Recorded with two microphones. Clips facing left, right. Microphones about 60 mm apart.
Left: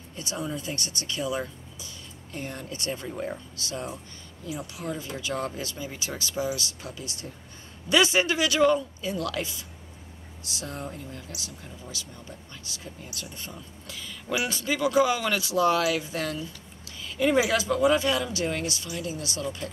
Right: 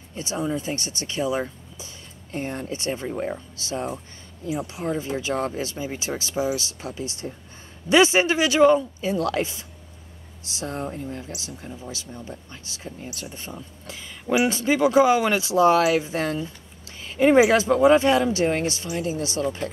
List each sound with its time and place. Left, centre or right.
0.1 s speech: right